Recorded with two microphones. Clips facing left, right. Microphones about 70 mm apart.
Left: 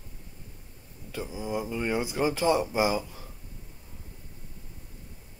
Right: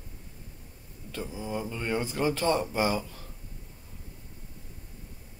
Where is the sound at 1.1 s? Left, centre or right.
Centre.